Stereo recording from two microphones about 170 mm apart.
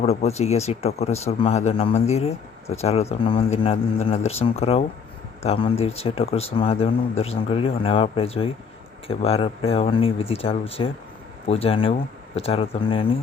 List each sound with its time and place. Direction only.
0.0 s speech: 40° left (ahead or behind)